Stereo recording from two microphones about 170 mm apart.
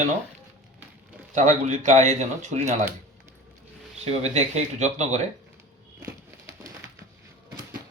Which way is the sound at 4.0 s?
40° right (ahead or behind).